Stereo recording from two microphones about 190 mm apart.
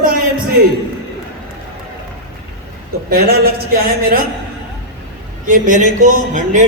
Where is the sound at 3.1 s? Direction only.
50° right (ahead or behind).